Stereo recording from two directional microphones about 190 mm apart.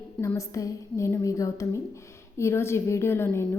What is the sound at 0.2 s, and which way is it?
A woman's voice, 15° left (ahead or behind).